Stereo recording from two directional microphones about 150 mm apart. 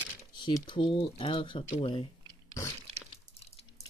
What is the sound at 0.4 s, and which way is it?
Speech, 35° left (ahead or behind).